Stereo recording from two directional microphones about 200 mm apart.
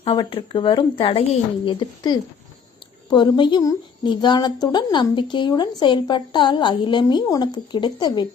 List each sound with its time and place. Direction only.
0.0 s a woman's voice: 25° left (ahead or behind)